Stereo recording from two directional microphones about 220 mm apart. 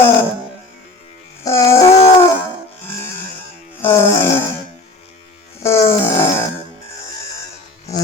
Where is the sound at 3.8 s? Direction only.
10° left (ahead or behind).